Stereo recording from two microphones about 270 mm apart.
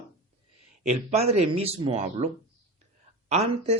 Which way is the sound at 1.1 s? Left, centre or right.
Right.